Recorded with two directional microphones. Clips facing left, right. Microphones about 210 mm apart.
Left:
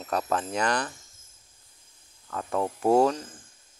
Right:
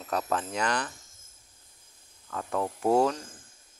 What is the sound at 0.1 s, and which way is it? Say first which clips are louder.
Speech: left 2 dB; 40° left (ahead or behind).